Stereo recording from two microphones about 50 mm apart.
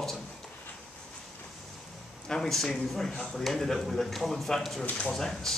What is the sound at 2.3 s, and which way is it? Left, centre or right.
Speech, centre.